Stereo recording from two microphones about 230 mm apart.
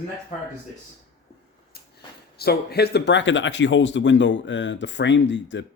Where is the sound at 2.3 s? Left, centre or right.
Left.